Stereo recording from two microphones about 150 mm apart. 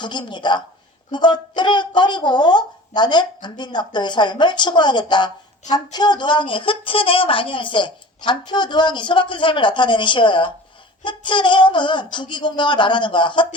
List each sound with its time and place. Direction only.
0.0 s a woman's voice: 30° left (ahead or behind)